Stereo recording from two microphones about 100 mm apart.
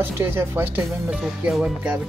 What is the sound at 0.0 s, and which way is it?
Speech, 25° right (ahead or behind).